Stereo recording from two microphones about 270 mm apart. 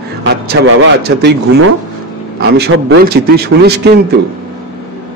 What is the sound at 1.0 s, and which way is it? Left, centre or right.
A man's voice, right.